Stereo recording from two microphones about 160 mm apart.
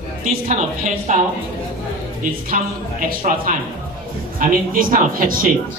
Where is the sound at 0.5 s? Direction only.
50° right (ahead or behind).